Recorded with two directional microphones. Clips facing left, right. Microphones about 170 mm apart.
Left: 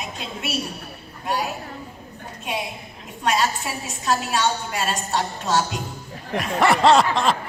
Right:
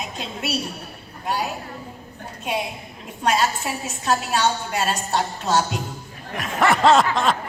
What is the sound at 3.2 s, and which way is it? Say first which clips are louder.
Speech: right 1 dB; 40° right (ahead or behind).